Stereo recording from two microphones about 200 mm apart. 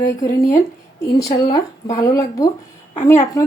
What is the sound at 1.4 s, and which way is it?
Speech, 20° left (ahead or behind).